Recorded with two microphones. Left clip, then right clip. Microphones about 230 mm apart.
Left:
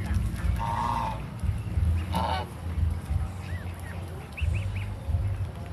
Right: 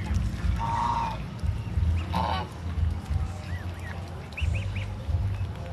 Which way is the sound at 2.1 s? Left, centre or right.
Centre.